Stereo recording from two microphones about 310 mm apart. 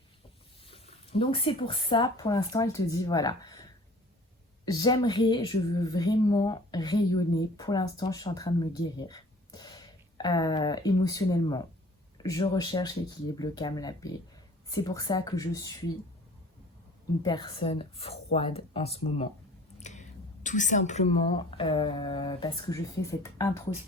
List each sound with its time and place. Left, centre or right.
0.7 s a woman's voice: centre
17.2 s a woman's voice: centre